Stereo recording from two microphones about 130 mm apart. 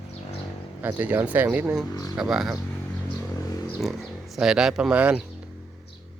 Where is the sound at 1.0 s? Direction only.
10° right (ahead or behind).